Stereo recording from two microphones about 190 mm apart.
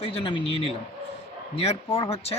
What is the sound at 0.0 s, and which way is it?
A man's voice, 30° left (ahead or behind).